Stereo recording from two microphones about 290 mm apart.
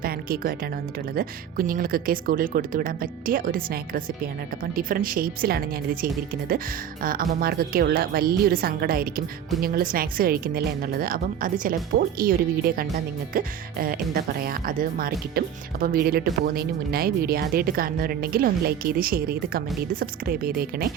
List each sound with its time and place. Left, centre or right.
0.0 s a woman's voice: right